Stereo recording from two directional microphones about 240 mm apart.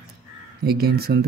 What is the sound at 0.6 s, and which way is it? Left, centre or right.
Speech, right.